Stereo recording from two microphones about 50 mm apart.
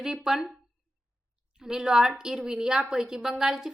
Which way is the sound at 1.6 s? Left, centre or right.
Centre.